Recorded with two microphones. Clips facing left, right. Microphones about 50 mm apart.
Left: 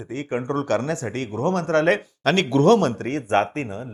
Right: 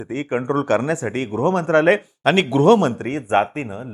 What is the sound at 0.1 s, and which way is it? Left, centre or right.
Speech, right.